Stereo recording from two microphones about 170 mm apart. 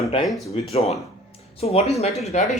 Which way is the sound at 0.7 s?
35° left (ahead or behind).